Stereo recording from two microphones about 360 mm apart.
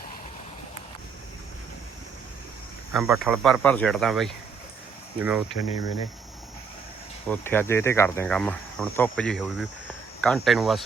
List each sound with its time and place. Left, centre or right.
2.9 s speech: centre
3.2 s cricket: centre
5.5 s speech: centre
7.3 s cricket: centre